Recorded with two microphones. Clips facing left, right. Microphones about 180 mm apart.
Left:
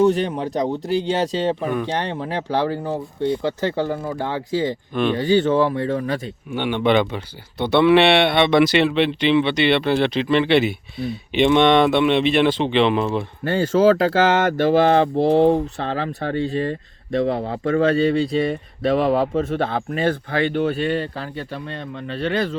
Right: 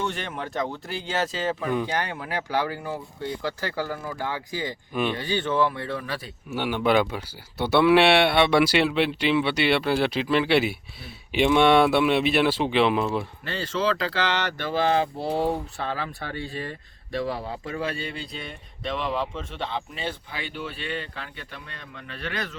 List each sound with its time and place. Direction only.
0.0 s speech: 35° left (ahead or behind)
5.1 s speech: 45° left (ahead or behind)
6.5 s speech: 5° right (ahead or behind)
13.4 s speech: 50° left (ahead or behind)
15.3 s speech: 25° left (ahead or behind)
15.8 s speech: 45° left (ahead or behind)
18.9 s speech: 45° left (ahead or behind); by 22.5 s 30° left (ahead or behind)